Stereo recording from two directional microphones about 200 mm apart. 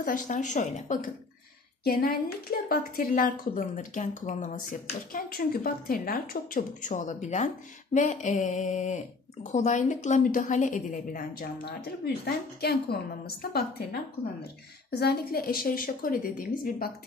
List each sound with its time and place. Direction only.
0.0 s a woman's voice: 40° left (ahead or behind)
1.9 s a woman's voice: 50° left (ahead or behind)
14.9 s a woman's voice: 55° left (ahead or behind)